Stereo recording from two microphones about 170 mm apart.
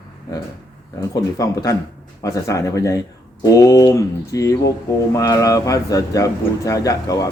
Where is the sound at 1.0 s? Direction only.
20° left (ahead or behind).